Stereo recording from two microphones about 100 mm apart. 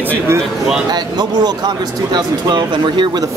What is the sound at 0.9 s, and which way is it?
Speech, 45° right (ahead or behind).